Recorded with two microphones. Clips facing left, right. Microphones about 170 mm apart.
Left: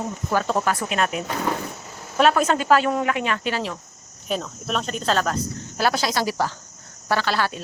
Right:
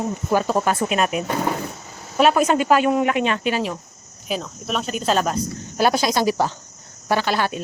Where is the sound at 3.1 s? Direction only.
20° right (ahead or behind).